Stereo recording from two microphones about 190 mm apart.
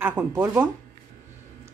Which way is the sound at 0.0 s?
10° right (ahead or behind).